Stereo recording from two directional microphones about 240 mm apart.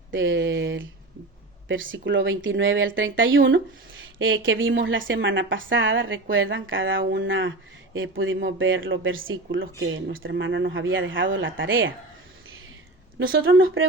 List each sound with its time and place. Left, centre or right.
0.1 s a woman's voice: right
13.1 s speech: right